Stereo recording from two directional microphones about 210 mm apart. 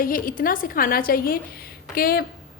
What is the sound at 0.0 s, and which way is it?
A woman's voice, 40° left (ahead or behind).